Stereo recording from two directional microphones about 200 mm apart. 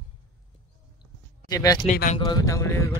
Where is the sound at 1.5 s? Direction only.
15° left (ahead or behind).